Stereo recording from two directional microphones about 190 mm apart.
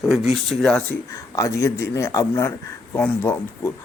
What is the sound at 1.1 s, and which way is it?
A man's voice, 15° left (ahead or behind).